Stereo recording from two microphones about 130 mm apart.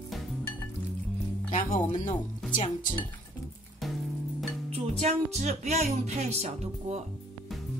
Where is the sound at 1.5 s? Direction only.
75° left (ahead or behind).